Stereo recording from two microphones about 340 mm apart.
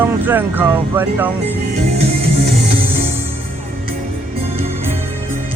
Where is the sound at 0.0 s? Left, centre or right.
Centre.